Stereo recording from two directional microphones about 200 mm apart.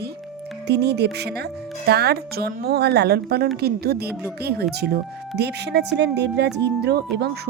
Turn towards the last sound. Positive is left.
turn(degrees=-55)  # may be behind; listen again after turning